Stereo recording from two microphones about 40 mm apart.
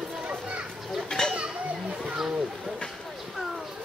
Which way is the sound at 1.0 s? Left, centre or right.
Centre.